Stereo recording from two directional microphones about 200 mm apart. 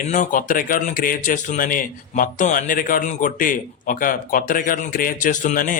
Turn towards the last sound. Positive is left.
turn(degrees=45)  # may be behind; listen again after turning